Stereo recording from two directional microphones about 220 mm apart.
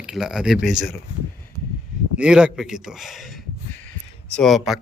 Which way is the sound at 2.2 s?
5° right (ahead or behind).